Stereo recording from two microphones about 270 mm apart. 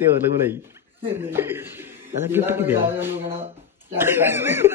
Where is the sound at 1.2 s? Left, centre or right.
Centre.